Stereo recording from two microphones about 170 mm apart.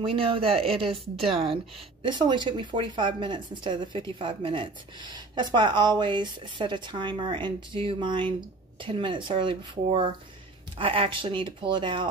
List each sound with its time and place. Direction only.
0.0 s a woman's voice: 30° right (ahead or behind)